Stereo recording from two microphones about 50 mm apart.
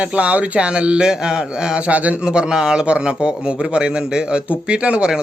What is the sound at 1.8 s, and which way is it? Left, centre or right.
Speech, right.